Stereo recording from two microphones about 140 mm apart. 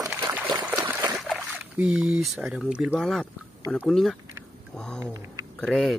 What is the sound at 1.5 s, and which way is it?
Speech, 10° right (ahead or behind).